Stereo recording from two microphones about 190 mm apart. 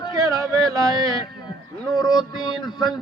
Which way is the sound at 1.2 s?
20° left (ahead or behind).